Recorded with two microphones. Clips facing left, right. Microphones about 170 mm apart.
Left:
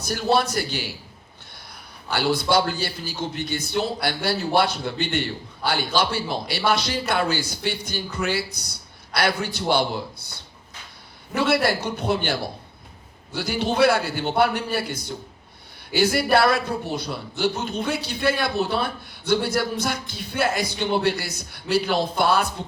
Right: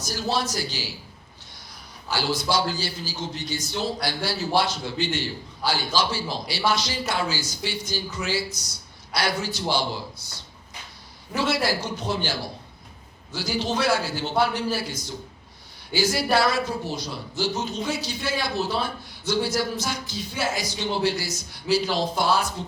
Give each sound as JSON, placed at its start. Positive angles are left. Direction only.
{"t": 0.0, "sound": "a man's voice", "side_deg": 60}
{"t": 2.0, "sound": "a man's voice", "side_deg": 60}